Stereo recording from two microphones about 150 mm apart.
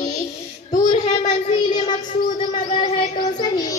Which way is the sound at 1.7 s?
30° left (ahead or behind).